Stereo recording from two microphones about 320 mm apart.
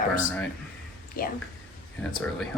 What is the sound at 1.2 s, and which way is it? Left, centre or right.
Speech, left.